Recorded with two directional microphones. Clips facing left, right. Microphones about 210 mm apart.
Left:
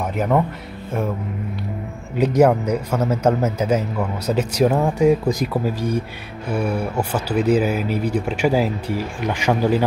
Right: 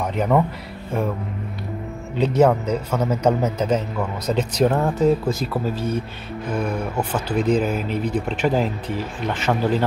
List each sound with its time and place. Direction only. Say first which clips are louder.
0.1 s a man's voice: even; 5° left (ahead or behind)
2.1 s a man's voice: left 2 dB; 10° left (ahead or behind)